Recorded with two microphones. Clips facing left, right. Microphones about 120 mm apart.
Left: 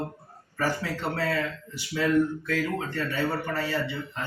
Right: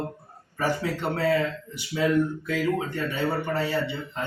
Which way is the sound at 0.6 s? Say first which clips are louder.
Right 2 dB; 20° right (ahead or behind).